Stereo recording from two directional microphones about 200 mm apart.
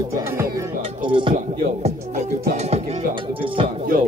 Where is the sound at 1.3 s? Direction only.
40° right (ahead or behind).